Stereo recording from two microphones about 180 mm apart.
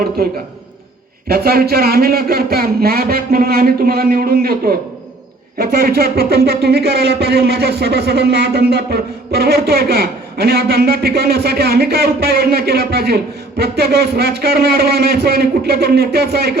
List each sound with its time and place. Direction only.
0.2 s speech: 55° right (ahead or behind)